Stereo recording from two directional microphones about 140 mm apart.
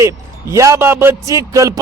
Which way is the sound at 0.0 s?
20° right (ahead or behind).